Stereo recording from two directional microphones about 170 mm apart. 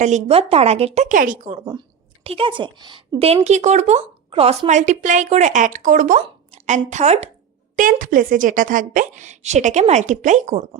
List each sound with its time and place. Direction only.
0.0 s speech: 40° right (ahead or behind)
2.2 s speech: 35° right (ahead or behind); by 6.1 s 50° right (ahead or behind)
6.1 s a sound: 30° right (ahead or behind)
6.7 s a woman's voice: 45° right (ahead or behind)
7.8 s a woman's voice: 50° right (ahead or behind)